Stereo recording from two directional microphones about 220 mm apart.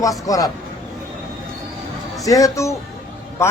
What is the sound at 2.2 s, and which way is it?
Speech, 15° left (ahead or behind).